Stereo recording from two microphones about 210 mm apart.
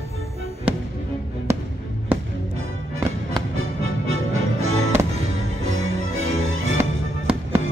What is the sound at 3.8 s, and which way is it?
Music, 75° right (ahead or behind).